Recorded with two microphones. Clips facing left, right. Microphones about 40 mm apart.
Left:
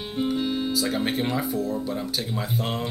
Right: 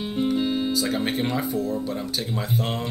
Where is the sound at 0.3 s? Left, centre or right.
Centre.